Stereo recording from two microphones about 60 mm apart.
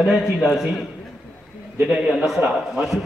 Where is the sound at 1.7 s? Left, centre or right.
Centre.